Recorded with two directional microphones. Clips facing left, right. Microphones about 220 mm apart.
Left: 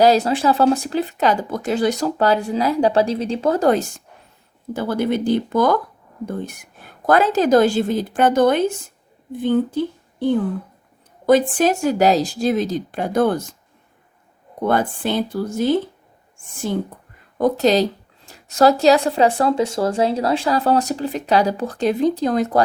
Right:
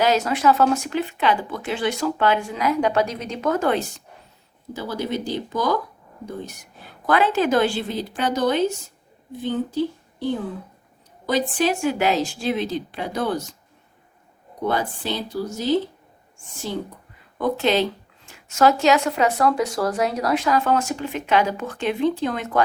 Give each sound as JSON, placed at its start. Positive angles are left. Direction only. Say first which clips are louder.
{"t": 0.0, "sound": "a woman's voice", "louder": "left 4 dB", "side_deg": 35}
{"t": 11.3, "sound": "a woman's voice", "louder": "left 6 dB", "side_deg": 50}
{"t": 14.6, "sound": "a woman's voice", "louder": "left 5 dB", "side_deg": 50}